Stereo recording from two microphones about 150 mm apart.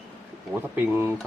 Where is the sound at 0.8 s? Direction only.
15° right (ahead or behind).